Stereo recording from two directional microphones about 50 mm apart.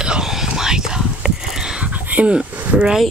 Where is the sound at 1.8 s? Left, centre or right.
Right.